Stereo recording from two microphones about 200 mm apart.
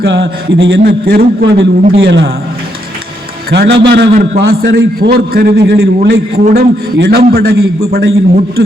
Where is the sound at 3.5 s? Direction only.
55° right (ahead or behind).